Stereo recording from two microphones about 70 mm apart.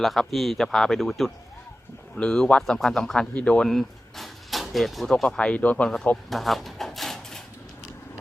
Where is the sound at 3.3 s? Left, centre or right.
Centre.